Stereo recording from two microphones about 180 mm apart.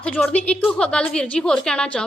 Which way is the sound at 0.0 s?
5° left (ahead or behind).